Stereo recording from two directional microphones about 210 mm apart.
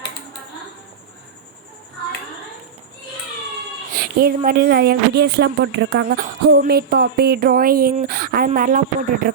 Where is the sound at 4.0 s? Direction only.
45° right (ahead or behind).